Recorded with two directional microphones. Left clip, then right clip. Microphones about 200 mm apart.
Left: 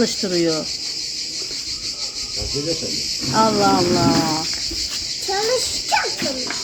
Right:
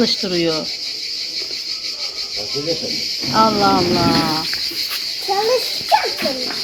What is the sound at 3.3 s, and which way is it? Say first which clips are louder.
Speech: right 2 dB; 45° left (ahead or behind).